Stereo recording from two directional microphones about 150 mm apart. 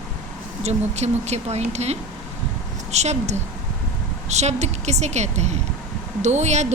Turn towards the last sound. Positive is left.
turn(degrees=-50)  # may be behind; listen again after turning